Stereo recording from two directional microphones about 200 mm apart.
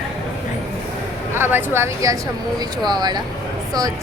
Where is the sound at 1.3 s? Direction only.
10° right (ahead or behind).